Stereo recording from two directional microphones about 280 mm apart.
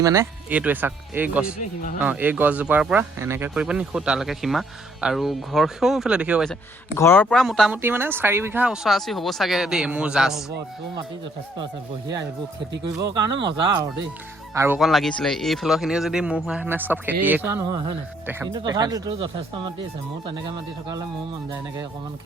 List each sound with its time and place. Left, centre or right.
0.0 s speech: centre
11.6 s speech: centre
14.5 s speech: centre